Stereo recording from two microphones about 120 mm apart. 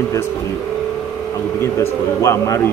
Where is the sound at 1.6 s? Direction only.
20° left (ahead or behind).